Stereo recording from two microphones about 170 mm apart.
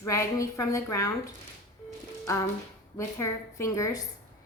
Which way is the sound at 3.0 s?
15° left (ahead or behind).